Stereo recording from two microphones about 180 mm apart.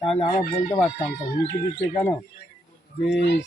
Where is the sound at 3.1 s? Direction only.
75° left (ahead or behind).